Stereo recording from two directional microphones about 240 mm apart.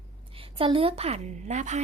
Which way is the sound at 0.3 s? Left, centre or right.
Right.